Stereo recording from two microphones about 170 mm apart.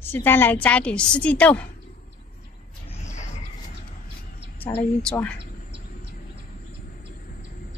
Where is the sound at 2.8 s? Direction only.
45° left (ahead or behind).